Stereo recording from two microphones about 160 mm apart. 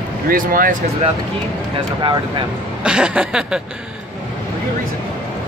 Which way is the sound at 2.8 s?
5° right (ahead or behind).